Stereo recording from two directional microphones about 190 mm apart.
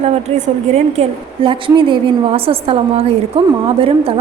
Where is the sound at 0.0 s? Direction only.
35° right (ahead or behind).